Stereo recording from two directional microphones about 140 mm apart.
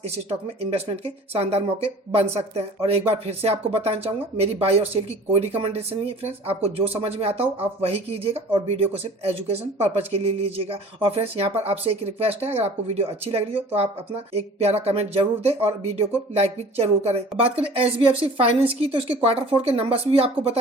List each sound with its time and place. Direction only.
0.3 s speech: 45° right (ahead or behind)